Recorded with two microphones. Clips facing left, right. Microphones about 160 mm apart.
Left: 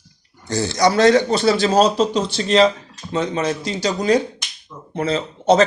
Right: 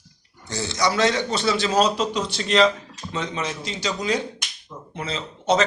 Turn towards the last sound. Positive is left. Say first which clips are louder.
# left 6 dB
turn(degrees=40)  # may be behind; listen again after turning